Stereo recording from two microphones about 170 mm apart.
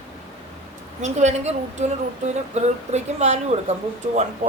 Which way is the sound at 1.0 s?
40° right (ahead or behind).